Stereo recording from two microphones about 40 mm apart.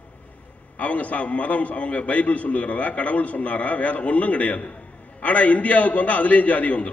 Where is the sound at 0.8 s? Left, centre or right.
Left.